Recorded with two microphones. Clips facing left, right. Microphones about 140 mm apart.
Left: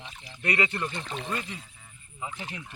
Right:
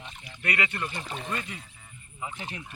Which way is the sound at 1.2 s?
10° left (ahead or behind).